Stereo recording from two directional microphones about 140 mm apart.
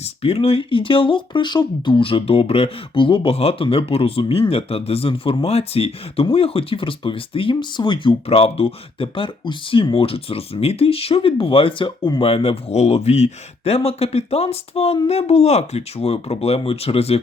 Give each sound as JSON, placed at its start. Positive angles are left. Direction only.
{"t": 0.0, "sound": "speech", "side_deg": 45}
{"t": 12.2, "sound": "speech", "side_deg": 45}